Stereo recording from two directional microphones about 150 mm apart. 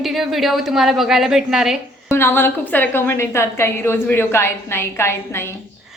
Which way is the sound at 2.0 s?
15° left (ahead or behind).